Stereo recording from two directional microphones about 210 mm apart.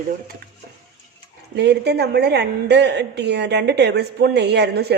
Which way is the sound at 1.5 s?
55° right (ahead or behind).